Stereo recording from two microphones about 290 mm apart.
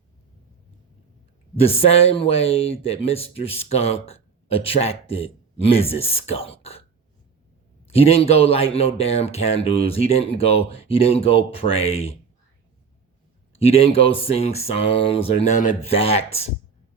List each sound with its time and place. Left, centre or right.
1.5 s speech: left
7.9 s speech: left
13.6 s speech: left